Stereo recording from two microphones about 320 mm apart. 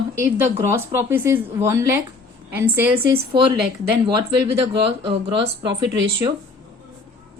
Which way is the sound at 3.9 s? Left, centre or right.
Centre.